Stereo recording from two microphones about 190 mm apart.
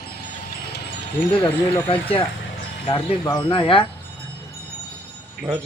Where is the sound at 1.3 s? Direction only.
25° left (ahead or behind).